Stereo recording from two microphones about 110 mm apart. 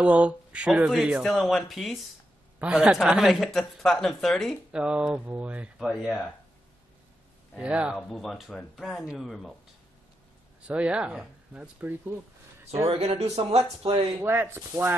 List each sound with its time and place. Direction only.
0.0 s speech: 10° right (ahead or behind)
2.6 s speech: 10° right (ahead or behind)
7.5 s speech: 10° right (ahead or behind)
8.1 s speech: centre (ahead or behind)
10.7 s speech: 10° right (ahead or behind)
12.0 s a sound: 20° right (ahead or behind)
12.9 s speech: 65° right (ahead or behind)
14.2 s speech: 20° right (ahead or behind)